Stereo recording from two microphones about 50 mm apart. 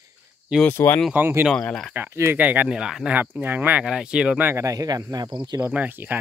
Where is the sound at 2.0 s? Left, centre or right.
Right.